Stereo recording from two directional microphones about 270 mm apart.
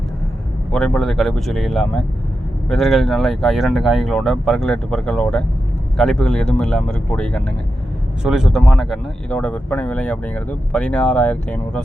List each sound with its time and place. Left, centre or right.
0.7 s speech: centre